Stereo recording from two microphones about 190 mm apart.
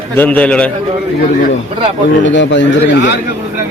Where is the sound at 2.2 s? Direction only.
75° left (ahead or behind).